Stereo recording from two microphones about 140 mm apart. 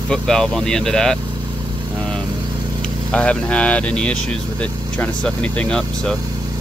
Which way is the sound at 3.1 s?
5° left (ahead or behind).